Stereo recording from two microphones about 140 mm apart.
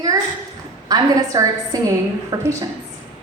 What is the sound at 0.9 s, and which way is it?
A woman's voice, 25° right (ahead or behind).